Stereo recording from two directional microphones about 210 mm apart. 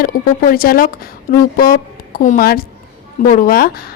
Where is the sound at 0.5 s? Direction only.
45° left (ahead or behind).